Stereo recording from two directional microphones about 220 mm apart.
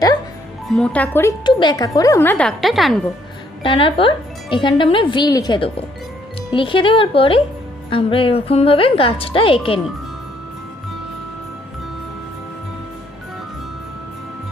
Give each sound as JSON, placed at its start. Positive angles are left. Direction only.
{"t": 0.7, "sound": "speech", "side_deg": 5}
{"t": 1.5, "sound": "speech", "side_deg": 20}
{"t": 3.6, "sound": "speech", "side_deg": 25}